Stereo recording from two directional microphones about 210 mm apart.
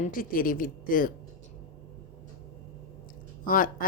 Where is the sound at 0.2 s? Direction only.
40° left (ahead or behind).